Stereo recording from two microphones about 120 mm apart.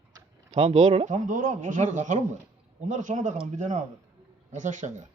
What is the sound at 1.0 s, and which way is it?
Speech, 90° right.